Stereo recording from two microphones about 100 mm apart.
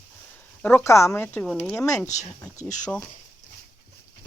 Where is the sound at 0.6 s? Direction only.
25° left (ahead or behind).